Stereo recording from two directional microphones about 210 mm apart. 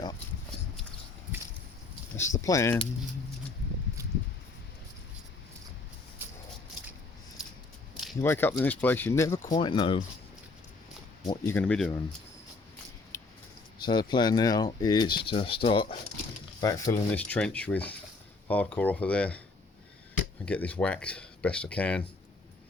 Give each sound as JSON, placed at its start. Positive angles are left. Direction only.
{"t": 2.4, "sound": "speech", "side_deg": 15}
{"t": 8.2, "sound": "speech", "side_deg": 10}
{"t": 11.3, "sound": "speech", "side_deg": 10}
{"t": 13.1, "sound": "a sound", "side_deg": 10}
{"t": 13.8, "sound": "speech", "side_deg": 20}
{"t": 17.1, "sound": "speech", "side_deg": 5}
{"t": 20.4, "sound": "speech", "side_deg": 5}